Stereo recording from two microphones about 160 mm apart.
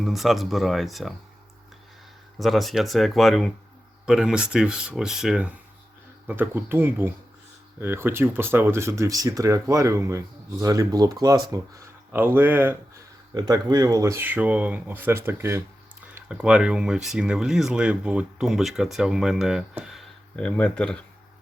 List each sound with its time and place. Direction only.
0.0 s speech: centre (ahead or behind)
2.4 s speech: centre (ahead or behind)
13.3 s speech: 25° right (ahead or behind); by 21.0 s 5° left (ahead or behind)